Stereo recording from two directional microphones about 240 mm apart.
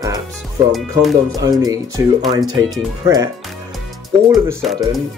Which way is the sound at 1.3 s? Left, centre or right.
Centre.